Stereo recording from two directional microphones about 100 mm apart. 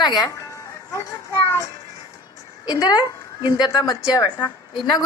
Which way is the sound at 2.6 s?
45° left (ahead or behind).